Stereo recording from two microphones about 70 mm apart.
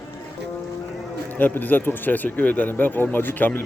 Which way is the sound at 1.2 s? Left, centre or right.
Left.